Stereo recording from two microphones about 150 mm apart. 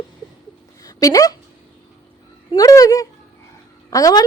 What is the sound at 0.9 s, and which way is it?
Speech, 25° left (ahead or behind).